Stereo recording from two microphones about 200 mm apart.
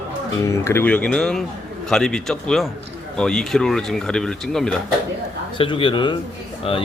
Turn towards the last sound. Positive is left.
turn(degrees=30)  # may be behind; listen again after turning